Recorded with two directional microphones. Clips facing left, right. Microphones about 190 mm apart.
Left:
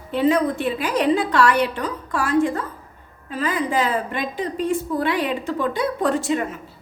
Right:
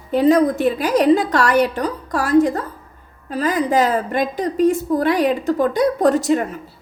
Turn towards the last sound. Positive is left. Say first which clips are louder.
# right 4 dB
turn(degrees=-40)  # may be behind; listen again after turning